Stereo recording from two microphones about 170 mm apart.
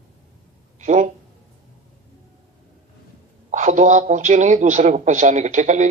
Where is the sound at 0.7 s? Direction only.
45° right (ahead or behind).